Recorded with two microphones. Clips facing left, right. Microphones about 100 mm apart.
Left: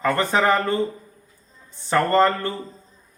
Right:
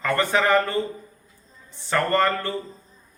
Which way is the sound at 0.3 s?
30° left (ahead or behind).